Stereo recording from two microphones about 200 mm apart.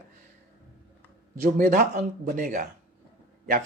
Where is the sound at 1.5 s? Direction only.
40° right (ahead or behind).